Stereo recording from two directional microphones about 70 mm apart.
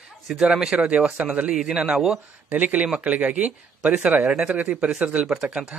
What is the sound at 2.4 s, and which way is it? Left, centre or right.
Speech, right.